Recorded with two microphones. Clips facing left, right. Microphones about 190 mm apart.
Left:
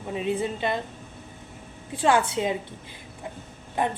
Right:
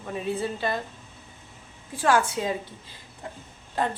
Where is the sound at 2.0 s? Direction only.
20° left (ahead or behind).